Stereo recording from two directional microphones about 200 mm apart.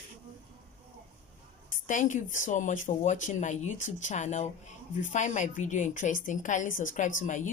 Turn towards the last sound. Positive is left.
turn(degrees=40)  # may be behind; listen again after turning